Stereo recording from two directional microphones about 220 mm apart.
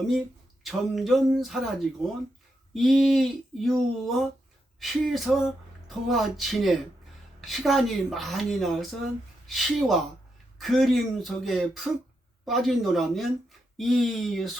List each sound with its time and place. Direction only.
0.6 s speech: centre (ahead or behind)
2.7 s speech: centre (ahead or behind)